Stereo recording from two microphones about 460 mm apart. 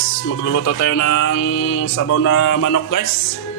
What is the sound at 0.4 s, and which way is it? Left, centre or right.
Music, left.